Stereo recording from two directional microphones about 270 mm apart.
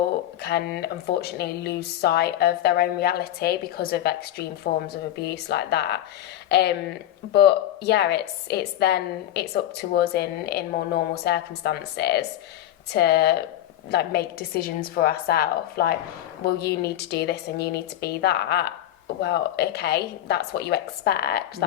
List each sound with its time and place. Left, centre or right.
0.4 s speech: left